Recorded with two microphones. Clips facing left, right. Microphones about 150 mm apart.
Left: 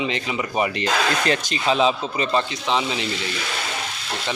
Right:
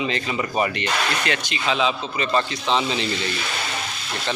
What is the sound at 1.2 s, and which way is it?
Speech, 40° left (ahead or behind).